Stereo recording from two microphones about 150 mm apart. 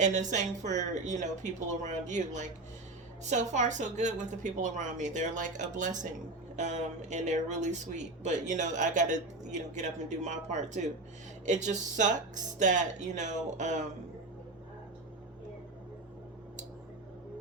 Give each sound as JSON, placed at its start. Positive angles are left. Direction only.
{"t": 0.0, "sound": "a woman's voice", "side_deg": -55}